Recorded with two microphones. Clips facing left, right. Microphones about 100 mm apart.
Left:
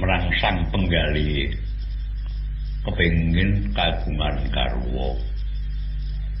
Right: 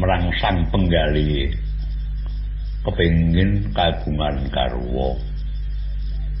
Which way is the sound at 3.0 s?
Centre (ahead or behind).